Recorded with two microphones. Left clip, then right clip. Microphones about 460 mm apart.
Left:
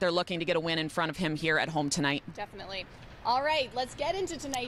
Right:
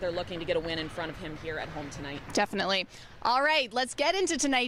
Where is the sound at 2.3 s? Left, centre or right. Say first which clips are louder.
Right 12 dB; right.